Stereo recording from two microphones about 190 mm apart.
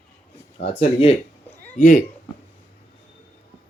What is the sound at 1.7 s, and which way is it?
Speech, 40° left (ahead or behind).